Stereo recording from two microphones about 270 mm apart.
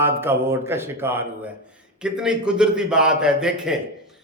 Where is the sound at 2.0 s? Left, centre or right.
Centre.